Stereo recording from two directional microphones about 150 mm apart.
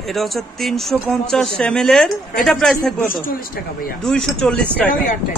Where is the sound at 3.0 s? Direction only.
75° left (ahead or behind).